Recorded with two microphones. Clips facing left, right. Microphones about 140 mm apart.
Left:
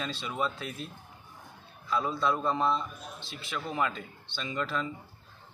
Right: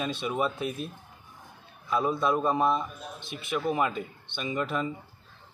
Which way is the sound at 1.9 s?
20° right (ahead or behind).